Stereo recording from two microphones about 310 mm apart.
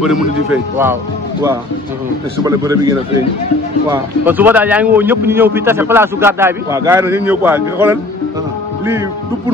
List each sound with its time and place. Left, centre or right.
0.0 s a man's voice: centre
2.4 s a man's voice: centre